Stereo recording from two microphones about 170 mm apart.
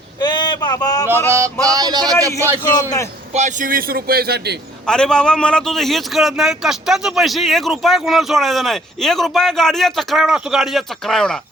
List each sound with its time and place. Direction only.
0.2 s a sound: 25° left (ahead or behind)
1.0 s music: 15° right (ahead or behind)
1.7 s a sound: 25° right (ahead or behind)
2.2 s a man's voice: 15° right (ahead or behind)
2.7 s a man's voice: 20° left (ahead or behind)
3.3 s a man's voice: 50° right (ahead or behind); by 4.5 s 65° right (ahead or behind)
4.9 s a man's voice: 5° left (ahead or behind)